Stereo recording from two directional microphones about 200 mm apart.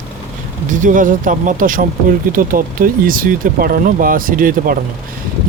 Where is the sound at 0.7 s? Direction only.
40° right (ahead or behind).